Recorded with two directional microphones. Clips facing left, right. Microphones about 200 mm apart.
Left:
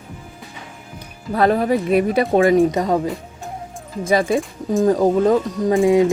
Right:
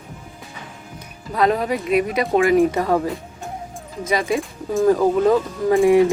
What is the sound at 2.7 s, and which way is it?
Speech, 20° left (ahead or behind).